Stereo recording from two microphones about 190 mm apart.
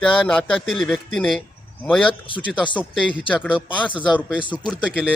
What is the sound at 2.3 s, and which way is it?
Speech, 25° left (ahead or behind).